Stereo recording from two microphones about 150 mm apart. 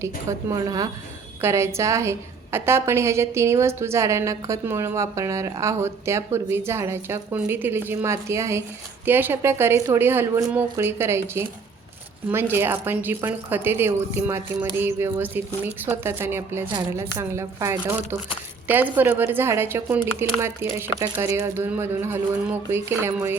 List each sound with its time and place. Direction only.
0.0 s a woman's voice: 20° right (ahead or behind)